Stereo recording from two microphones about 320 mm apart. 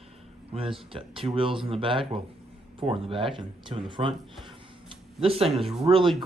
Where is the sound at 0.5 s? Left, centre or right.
Centre.